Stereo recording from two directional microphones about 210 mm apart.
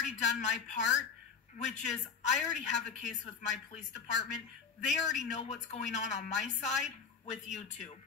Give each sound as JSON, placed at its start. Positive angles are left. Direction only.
{"t": 0.0, "sound": "a woman's voice", "side_deg": 35}